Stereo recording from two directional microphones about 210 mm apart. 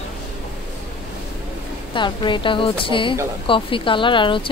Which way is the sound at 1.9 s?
20° left (ahead or behind).